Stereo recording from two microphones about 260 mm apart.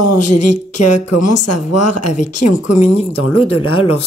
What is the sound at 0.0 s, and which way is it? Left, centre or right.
Speech, left.